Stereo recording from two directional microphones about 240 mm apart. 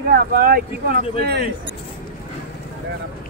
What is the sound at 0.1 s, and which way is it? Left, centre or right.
Speech, right.